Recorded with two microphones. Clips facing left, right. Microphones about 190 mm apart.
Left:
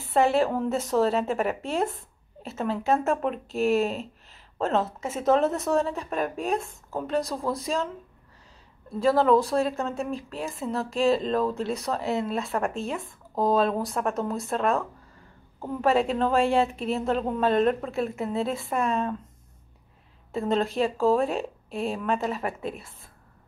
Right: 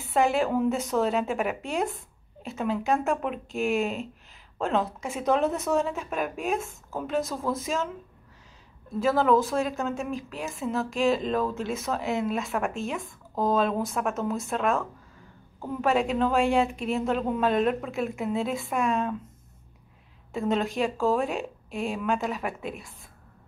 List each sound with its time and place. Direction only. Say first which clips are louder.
0.0 s a woman's voice: left 2 dB; centre (ahead or behind)
9.0 s a woman's voice: left 2 dB; centre (ahead or behind)
20.3 s a woman's voice: left 1 dB; centre (ahead or behind)
22.5 s a woman's voice: left 2 dB; 35° left (ahead or behind)